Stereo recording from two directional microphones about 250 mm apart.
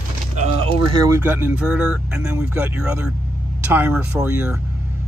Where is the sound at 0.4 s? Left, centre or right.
Right.